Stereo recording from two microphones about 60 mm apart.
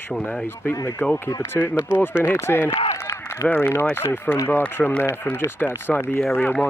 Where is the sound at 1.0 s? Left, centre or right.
Left.